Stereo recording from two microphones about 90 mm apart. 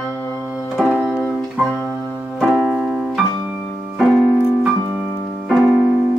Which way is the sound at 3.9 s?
5° right (ahead or behind).